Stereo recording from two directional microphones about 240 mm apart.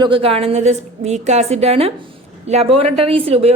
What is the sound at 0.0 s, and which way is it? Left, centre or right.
A woman's voice, right.